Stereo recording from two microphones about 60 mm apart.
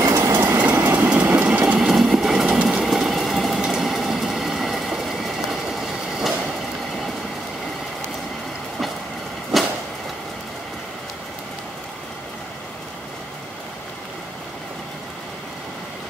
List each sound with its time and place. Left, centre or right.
0.0 s train: right
0.6 s vehicle: right
1.8 s sewing machine: centre
3.6 s train: centre
9.5 s a sound: centre